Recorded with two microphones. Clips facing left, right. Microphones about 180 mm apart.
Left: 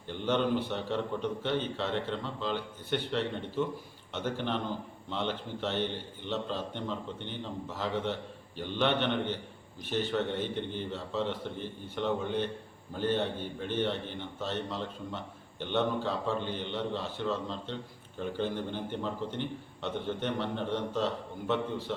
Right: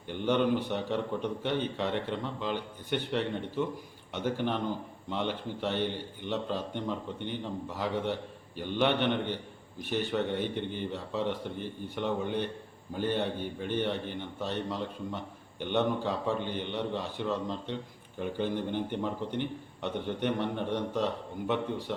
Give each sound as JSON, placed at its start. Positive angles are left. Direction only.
{"t": 0.1, "sound": "a man's voice", "side_deg": -15}